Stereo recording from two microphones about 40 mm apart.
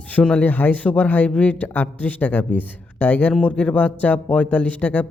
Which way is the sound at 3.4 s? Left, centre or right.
Left.